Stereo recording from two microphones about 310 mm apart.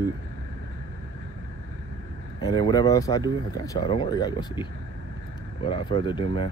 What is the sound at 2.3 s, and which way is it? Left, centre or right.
Speech, centre.